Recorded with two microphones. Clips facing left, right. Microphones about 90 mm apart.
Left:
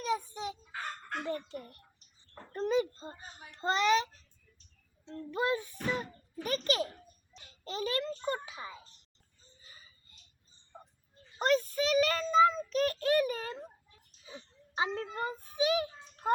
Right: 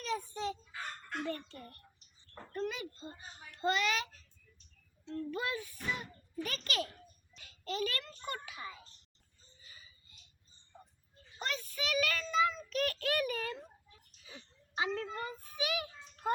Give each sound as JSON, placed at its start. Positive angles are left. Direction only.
{"t": 0.0, "sound": "chicken", "side_deg": 15}
{"t": 0.7, "sound": "fowl", "side_deg": 50}
{"t": 1.3, "sound": "speech", "side_deg": 20}
{"t": 2.5, "sound": "a child's voice", "side_deg": 30}
{"t": 11.3, "sound": "speech", "side_deg": 40}
{"t": 14.3, "sound": "a sound", "side_deg": 30}
{"t": 15.0, "sound": "a child's voice", "side_deg": 30}